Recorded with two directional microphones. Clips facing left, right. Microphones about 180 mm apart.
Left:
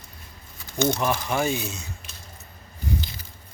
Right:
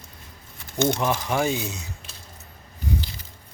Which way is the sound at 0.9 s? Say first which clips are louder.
Even; 20° right (ahead or behind).